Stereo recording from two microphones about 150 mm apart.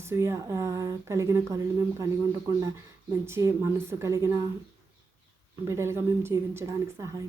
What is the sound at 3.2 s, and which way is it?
A woman's voice, 20° right (ahead or behind).